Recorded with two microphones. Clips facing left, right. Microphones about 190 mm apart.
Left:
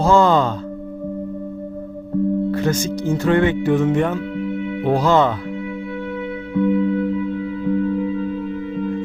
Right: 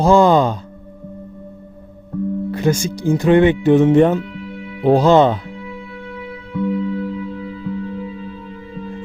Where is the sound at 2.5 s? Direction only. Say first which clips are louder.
Right 1 dB; 15° right (ahead or behind).